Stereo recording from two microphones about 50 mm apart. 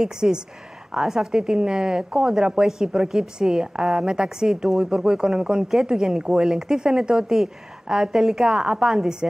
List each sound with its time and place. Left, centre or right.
0.0 s a woman's voice: centre